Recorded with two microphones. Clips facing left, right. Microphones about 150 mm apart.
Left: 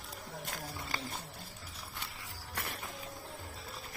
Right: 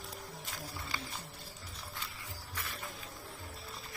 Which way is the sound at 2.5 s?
60° left (ahead or behind).